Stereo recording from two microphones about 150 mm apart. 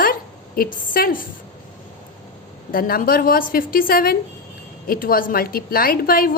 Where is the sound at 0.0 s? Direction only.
75° left (ahead or behind).